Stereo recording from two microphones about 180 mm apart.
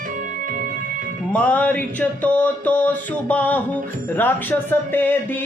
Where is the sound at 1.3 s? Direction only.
10° left (ahead or behind).